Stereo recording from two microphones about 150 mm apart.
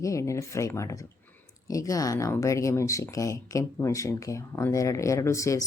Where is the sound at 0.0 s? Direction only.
20° left (ahead or behind).